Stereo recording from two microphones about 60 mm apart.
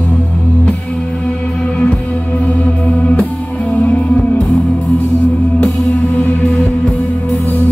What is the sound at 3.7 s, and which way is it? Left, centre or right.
Music, left.